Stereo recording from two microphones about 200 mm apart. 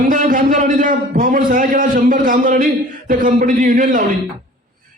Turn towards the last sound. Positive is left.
turn(degrees=-40)  # may be behind; listen again after turning